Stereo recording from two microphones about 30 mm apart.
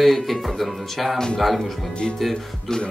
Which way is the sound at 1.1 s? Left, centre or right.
Left.